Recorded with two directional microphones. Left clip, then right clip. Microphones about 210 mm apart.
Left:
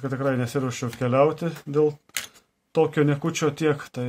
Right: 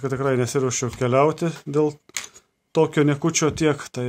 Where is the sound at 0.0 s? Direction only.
35° right (ahead or behind).